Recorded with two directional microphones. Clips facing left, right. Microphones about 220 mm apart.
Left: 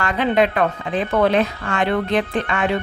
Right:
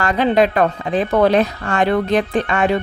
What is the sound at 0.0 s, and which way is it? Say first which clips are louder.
Speech: right 3 dB; 40° right (ahead or behind).